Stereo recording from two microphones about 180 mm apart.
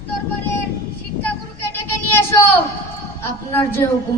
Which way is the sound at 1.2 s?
10° left (ahead or behind).